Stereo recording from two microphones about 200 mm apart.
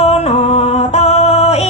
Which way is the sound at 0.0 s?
30° left (ahead or behind).